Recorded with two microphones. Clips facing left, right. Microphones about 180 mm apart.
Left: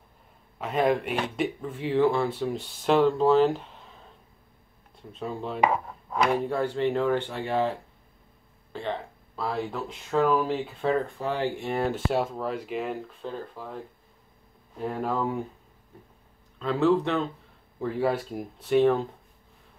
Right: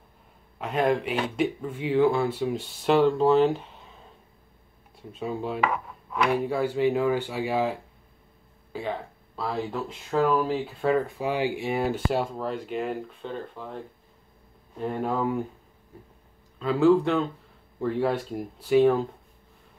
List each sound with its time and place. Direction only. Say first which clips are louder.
0.6 s speech: even; centre (ahead or behind)
5.1 s speech: right 2 dB; 5° right (ahead or behind)
6.0 s a sound: even; 35° left (ahead or behind)
6.3 s speech: right 1 dB; 5° right (ahead or behind)
14.8 s speech: right 1 dB; centre (ahead or behind)
16.5 s speech: right 3 dB; centre (ahead or behind)